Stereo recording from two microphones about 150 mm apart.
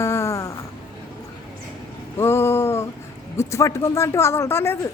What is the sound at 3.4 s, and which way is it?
Speech, 20° left (ahead or behind).